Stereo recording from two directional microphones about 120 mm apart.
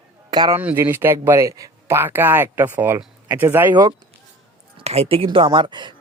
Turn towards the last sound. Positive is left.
turn(degrees=-40)  # may be behind; listen again after turning